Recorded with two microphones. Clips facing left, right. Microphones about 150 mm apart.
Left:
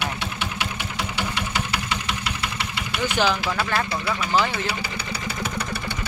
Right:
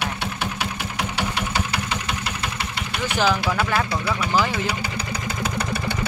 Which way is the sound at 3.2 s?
5° right (ahead or behind).